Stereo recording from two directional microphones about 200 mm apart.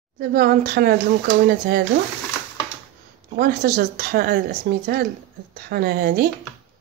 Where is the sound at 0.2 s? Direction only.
50° right (ahead or behind).